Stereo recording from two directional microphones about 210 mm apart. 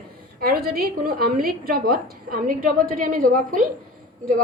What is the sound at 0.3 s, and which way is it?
A woman's voice, 45° right (ahead or behind).